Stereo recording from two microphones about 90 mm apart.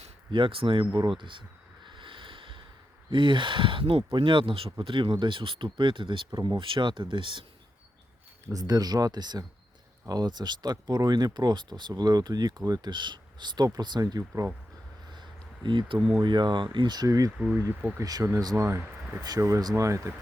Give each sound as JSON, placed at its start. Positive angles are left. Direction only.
{"t": 0.3, "sound": "speech", "side_deg": -65}
{"t": 0.9, "sound": "a sound", "side_deg": -60}
{"t": 3.1, "sound": "speech", "side_deg": -65}
{"t": 4.1, "sound": "speech", "side_deg": -65}
{"t": 8.5, "sound": "speech", "side_deg": -45}
{"t": 15.6, "sound": "speech", "side_deg": -60}
{"t": 16.0, "sound": "speech", "side_deg": -10}
{"t": 16.2, "sound": "speech", "side_deg": -60}
{"t": 17.3, "sound": "speech", "side_deg": -20}
{"t": 18.0, "sound": "speech", "side_deg": -45}
{"t": 18.6, "sound": "speech", "side_deg": -35}